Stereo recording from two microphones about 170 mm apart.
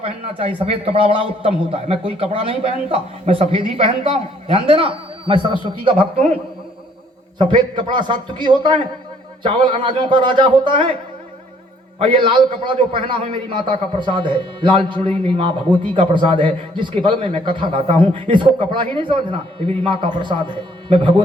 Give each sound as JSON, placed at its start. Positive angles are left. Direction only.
{"t": 0.0, "sound": "a man's voice", "side_deg": -35}
{"t": 7.3, "sound": "a man's voice", "side_deg": -25}
{"t": 11.9, "sound": "a man's voice", "side_deg": -30}